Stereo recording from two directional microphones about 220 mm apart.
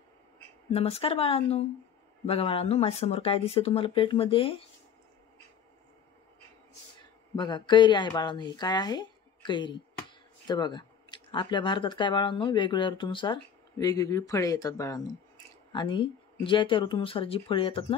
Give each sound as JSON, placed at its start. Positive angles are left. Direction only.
{"t": 0.7, "sound": "speech", "side_deg": 25}
{"t": 7.3, "sound": "speech", "side_deg": 20}